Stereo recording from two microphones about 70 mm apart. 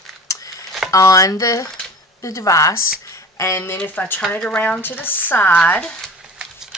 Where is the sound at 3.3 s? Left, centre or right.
Left.